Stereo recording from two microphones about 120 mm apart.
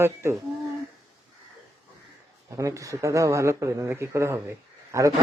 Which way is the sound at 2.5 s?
25° right (ahead or behind).